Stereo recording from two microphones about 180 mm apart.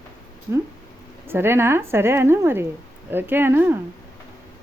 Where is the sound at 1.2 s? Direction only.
10° right (ahead or behind).